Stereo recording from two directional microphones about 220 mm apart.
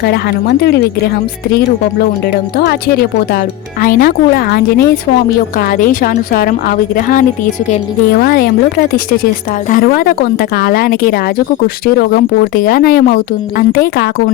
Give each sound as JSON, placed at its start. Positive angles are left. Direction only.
{"t": 0.0, "sound": "a woman's voice", "side_deg": 45}